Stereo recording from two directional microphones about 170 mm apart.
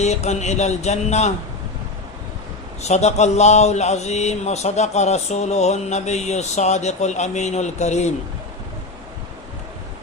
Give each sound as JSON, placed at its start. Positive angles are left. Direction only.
{"t": 0.0, "sound": "speech", "side_deg": 40}
{"t": 2.8, "sound": "speech", "side_deg": 40}